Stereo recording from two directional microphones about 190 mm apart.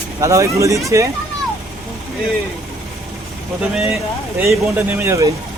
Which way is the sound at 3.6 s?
5° right (ahead or behind).